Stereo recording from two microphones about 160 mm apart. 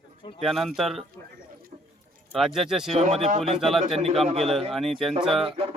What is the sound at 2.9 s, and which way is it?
Speech, 40° right (ahead or behind).